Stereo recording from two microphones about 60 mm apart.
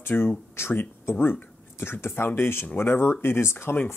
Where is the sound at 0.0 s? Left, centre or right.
Left.